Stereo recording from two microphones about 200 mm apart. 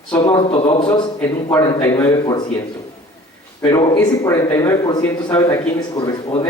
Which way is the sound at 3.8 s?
20° left (ahead or behind).